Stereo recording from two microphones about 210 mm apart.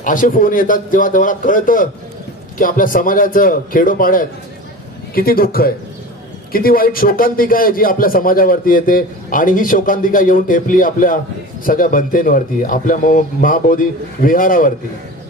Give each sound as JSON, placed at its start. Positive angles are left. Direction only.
{"t": 0.0, "sound": "a man's voice", "side_deg": 40}